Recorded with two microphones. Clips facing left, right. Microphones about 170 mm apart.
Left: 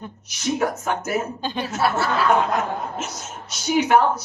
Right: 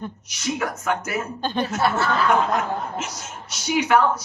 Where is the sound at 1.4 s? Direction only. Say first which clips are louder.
Right 1 dB; 5° left (ahead or behind).